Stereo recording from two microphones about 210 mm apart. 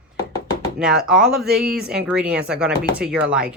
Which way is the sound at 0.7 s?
5° right (ahead or behind).